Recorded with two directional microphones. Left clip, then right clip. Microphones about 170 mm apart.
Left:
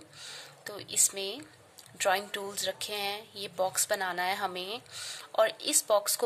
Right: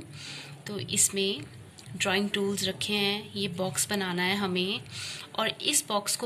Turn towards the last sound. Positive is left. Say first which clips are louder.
# left 2 dB
turn(degrees=55)  # may be behind; listen again after turning